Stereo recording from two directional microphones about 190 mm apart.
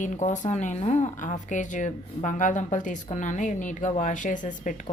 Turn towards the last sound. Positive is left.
turn(degrees=45)  # may be behind; listen again after turning